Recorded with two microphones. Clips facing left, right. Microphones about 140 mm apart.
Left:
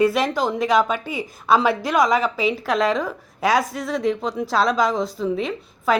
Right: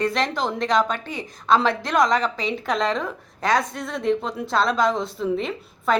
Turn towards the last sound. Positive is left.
turn(degrees=0)  # may be behind; listen again after turning